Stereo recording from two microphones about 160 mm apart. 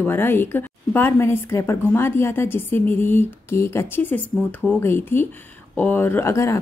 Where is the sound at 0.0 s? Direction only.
15° left (ahead or behind).